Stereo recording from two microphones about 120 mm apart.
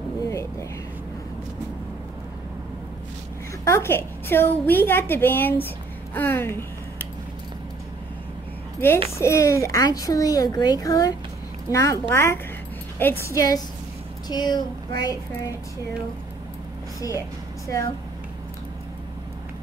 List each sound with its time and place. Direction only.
0.3 s a sound: 25° left (ahead or behind)
3.6 s a woman's voice: 20° left (ahead or behind)
9.2 s a child's voice: 25° left (ahead or behind)
17.0 s a child's voice: 30° left (ahead or behind)